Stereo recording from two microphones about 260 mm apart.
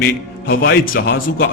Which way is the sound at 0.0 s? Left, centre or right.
Left.